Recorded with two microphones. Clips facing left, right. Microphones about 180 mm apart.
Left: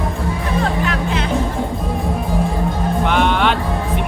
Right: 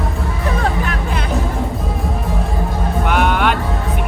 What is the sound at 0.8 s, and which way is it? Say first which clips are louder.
Music: left 2 dB; 50° right (ahead or behind).